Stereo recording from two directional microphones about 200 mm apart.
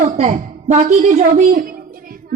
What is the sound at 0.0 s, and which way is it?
A woman's voice, 35° right (ahead or behind).